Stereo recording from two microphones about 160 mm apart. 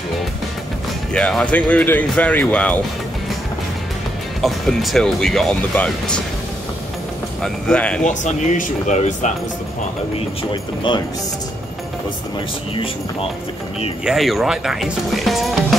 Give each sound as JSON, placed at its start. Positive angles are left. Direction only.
{"t": 1.1, "sound": "speech", "side_deg": 5}
{"t": 4.4, "sound": "speech", "side_deg": 0}
{"t": 7.4, "sound": "speech", "side_deg": 5}
{"t": 8.0, "sound": "speech", "side_deg": 50}
{"t": 10.5, "sound": "speech", "side_deg": 30}
{"t": 12.7, "sound": "speech", "side_deg": 35}
{"t": 14.0, "sound": "speech", "side_deg": 0}